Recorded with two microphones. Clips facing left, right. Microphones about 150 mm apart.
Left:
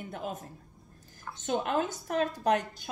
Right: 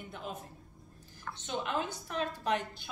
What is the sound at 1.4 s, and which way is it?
A woman's voice, 45° left (ahead or behind).